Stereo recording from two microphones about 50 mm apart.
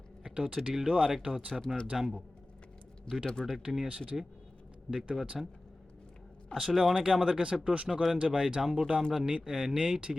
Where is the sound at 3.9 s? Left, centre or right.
Centre.